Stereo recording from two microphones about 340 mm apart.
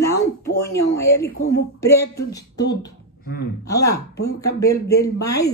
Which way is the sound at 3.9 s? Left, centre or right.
Left.